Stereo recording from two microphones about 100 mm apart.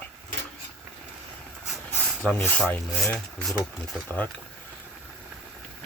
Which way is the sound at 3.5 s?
Centre (ahead or behind).